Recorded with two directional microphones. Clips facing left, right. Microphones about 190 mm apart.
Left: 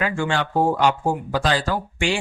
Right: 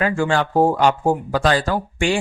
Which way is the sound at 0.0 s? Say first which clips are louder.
Right 4 dB; 45° right (ahead or behind).